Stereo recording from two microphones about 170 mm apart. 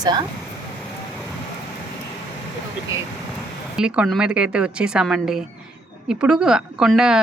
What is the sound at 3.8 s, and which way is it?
Speech, 5° right (ahead or behind).